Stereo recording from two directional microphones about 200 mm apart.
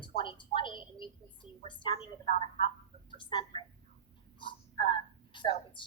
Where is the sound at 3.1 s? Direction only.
25° left (ahead or behind).